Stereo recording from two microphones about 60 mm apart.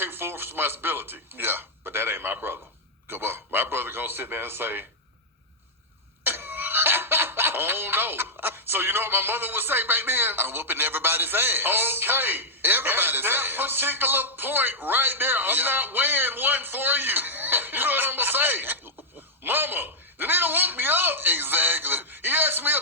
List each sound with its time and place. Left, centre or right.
0.0 s a man's voice: right
6.2 s speech: right